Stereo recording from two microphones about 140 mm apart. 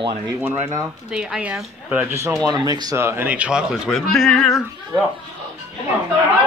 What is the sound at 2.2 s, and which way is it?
Speech, 25° right (ahead or behind).